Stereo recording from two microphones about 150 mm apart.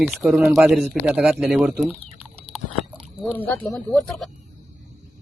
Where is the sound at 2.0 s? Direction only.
45° right (ahead or behind).